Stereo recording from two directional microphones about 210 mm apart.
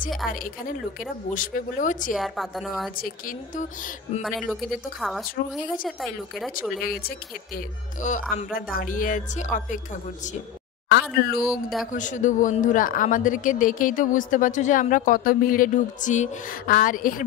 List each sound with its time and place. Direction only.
0.3 s a woman's voice: 40° left (ahead or behind)
2.1 s a woman's voice: centre (ahead or behind)
3.0 s a woman's voice: 40° left (ahead or behind)
5.0 s a woman's voice: centre (ahead or behind)
5.4 s speech: 50° left (ahead or behind)
5.9 s a woman's voice: centre (ahead or behind)
6.8 s a woman's voice: 45° left (ahead or behind)
10.9 s speech: 50° left (ahead or behind)
11.4 s a woman's voice: centre (ahead or behind)
11.9 s a woman's voice: 35° left (ahead or behind)